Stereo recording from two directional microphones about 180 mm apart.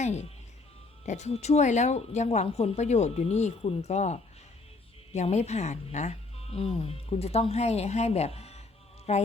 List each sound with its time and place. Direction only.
0.0 s speech: 40° left (ahead or behind)